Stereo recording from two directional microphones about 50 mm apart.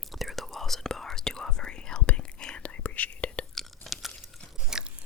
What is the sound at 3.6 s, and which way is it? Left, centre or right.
Chewing, centre.